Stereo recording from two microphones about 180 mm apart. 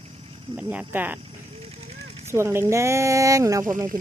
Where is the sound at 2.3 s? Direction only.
15° right (ahead or behind).